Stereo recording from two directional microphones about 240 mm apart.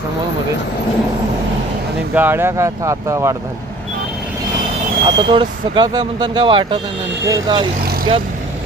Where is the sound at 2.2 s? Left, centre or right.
Centre.